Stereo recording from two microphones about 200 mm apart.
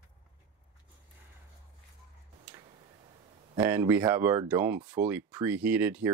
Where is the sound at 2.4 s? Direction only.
20° right (ahead or behind).